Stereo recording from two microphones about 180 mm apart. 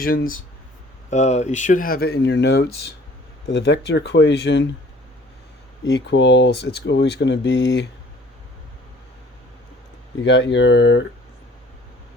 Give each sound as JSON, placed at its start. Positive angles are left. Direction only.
{"t": 0.0, "sound": "speech", "side_deg": 55}
{"t": 1.1, "sound": "speech", "side_deg": 40}
{"t": 5.8, "sound": "speech", "side_deg": 80}
{"t": 10.2, "sound": "speech", "side_deg": 90}